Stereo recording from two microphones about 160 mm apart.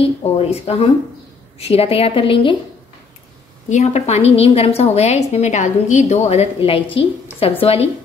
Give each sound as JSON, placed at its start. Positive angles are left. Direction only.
{"t": 0.0, "sound": "a woman's voice", "side_deg": 40}
{"t": 3.6, "sound": "a woman's voice", "side_deg": 45}